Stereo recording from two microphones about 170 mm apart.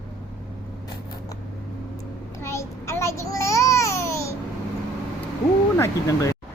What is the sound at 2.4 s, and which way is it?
Babbling, 15° left (ahead or behind).